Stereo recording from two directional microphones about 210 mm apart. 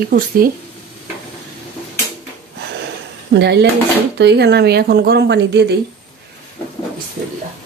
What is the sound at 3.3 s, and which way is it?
A woman's voice, 55° right (ahead or behind).